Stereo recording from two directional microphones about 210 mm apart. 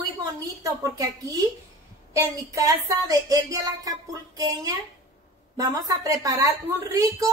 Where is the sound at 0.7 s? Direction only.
15° right (ahead or behind).